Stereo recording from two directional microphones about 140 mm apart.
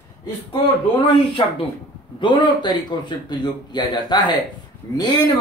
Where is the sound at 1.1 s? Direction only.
40° left (ahead or behind).